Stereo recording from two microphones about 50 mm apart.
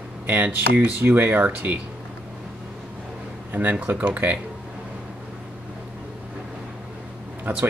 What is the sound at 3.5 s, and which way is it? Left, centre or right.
Speech, right.